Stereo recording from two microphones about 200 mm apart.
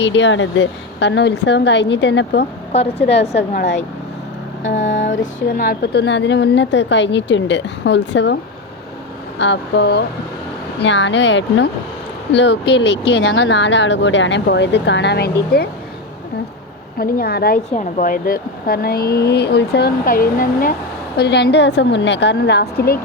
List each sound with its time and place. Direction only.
0.0 s speech: 65° left (ahead or behind)
2.7 s a woman's voice: 30° left (ahead or behind)
3.5 s speech: 60° left (ahead or behind)
4.9 s a sound: 65° left (ahead or behind)
5.2 s speech: 45° left (ahead or behind); by 8.4 s 60° left (ahead or behind)
9.4 s speech: 60° left (ahead or behind)
17.0 s speech: 50° left (ahead or behind)
17.7 s speech: 40° left (ahead or behind)
21.2 s speech: 55° left (ahead or behind)